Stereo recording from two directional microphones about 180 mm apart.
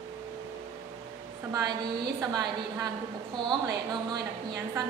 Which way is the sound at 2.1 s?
20° right (ahead or behind).